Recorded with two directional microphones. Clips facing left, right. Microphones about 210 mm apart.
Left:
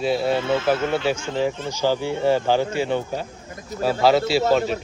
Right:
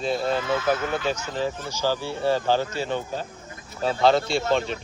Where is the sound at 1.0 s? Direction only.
10° left (ahead or behind).